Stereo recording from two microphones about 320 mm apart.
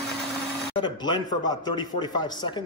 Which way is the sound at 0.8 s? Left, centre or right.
Centre.